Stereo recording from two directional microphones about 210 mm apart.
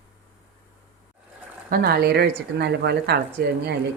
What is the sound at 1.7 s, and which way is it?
A woman's voice, 45° right (ahead or behind).